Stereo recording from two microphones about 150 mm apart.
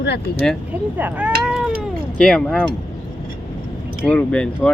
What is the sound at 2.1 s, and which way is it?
Speech, 5° left (ahead or behind).